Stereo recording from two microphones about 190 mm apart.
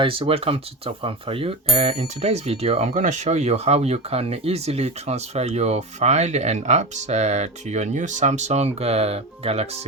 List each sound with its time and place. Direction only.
0.0 s speech: 30° right (ahead or behind)